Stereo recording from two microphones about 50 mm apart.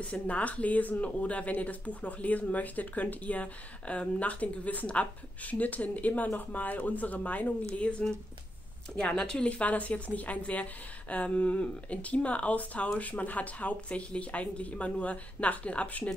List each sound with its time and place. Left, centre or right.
0.1 s a woman's voice: left